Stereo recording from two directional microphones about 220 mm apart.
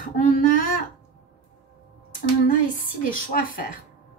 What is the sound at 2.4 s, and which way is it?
A woman's voice, 40° left (ahead or behind).